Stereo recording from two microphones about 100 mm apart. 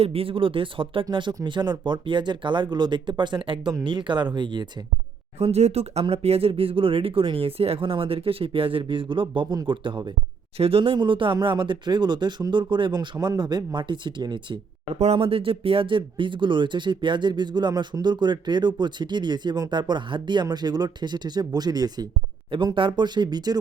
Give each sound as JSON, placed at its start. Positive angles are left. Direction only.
{"t": 0.0, "sound": "speech", "side_deg": -70}
{"t": 5.4, "sound": "speech", "side_deg": -90}
{"t": 10.6, "sound": "speech", "side_deg": -70}
{"t": 15.0, "sound": "speech", "side_deg": -80}
{"t": 22.5, "sound": "speech", "side_deg": -55}